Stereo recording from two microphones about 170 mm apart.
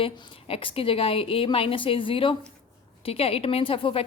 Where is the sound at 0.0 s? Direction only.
30° left (ahead or behind).